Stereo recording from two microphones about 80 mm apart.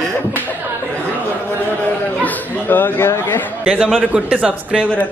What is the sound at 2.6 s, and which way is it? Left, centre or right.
Speech, left.